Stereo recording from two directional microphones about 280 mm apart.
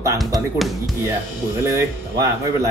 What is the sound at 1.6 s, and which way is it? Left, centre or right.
Speech, centre.